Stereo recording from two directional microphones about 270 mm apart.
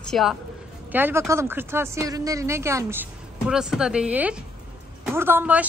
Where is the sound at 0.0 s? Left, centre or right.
Centre.